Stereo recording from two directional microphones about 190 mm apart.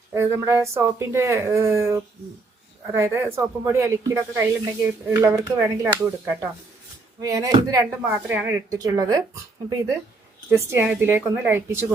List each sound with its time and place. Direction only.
0.1 s speech: 15° right (ahead or behind)